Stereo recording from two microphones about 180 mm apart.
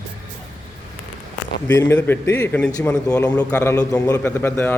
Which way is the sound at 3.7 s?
20° left (ahead or behind).